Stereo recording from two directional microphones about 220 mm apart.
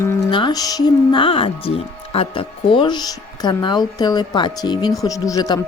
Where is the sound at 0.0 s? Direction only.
15° left (ahead or behind).